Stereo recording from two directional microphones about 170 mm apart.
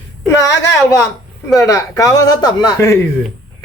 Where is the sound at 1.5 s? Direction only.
20° left (ahead or behind).